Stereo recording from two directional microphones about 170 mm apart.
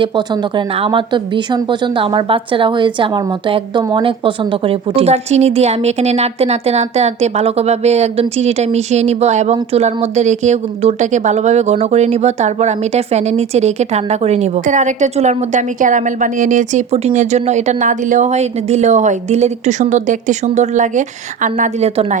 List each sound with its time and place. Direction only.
0.0 s a woman's voice: 30° right (ahead or behind)